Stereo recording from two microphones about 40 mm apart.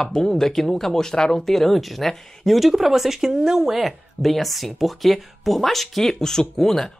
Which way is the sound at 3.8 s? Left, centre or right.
Centre.